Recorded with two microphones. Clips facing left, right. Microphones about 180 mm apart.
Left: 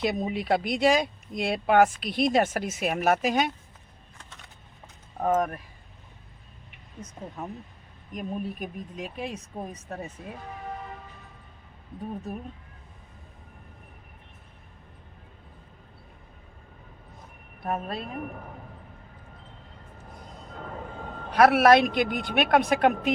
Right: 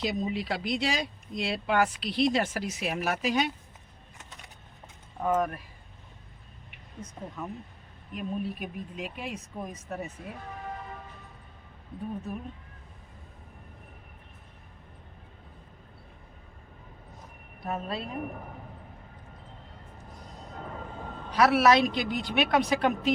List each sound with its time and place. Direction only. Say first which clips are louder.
0.0 s speech: left 2 dB; 55° left (ahead or behind)
5.2 s speech: left 2 dB; 40° left (ahead or behind)
8.1 s speech: even; 45° left (ahead or behind)
12.3 s speech: left 1 dB; 40° left (ahead or behind)
17.6 s speech: left 2 dB; 50° left (ahead or behind)
21.2 s speech: left 4 dB; 55° left (ahead or behind)